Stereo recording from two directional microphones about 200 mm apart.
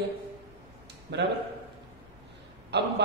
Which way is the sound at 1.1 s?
60° right (ahead or behind).